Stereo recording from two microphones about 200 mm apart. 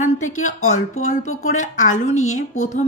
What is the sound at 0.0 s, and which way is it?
A woman's voice, 40° left (ahead or behind).